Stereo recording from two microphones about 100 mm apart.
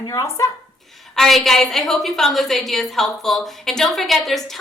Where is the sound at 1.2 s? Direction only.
Centre (ahead or behind).